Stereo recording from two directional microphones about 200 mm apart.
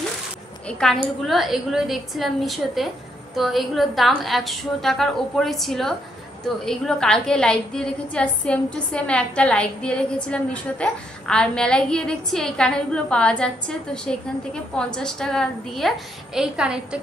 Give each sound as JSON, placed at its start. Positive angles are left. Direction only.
{"t": 0.7, "sound": "a woman's voice", "side_deg": 5}